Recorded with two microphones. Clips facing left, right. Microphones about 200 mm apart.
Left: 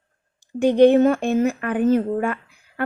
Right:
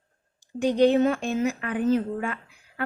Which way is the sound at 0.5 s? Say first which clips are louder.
Left 6 dB; 55° left (ahead or behind).